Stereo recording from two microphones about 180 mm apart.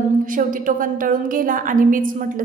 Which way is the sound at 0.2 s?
50° right (ahead or behind).